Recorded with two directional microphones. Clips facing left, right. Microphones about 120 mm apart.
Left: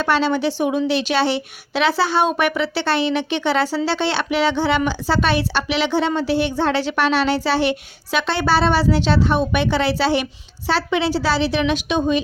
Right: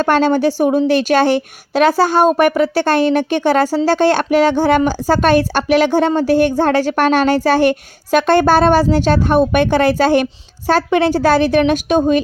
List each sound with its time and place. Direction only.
0.0 s a woman's voice: 45° right (ahead or behind)